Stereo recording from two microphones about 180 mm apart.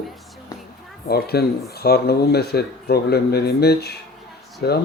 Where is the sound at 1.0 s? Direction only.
60° left (ahead or behind).